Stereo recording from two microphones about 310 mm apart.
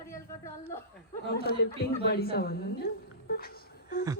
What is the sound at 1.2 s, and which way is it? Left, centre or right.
A woman's voice, left.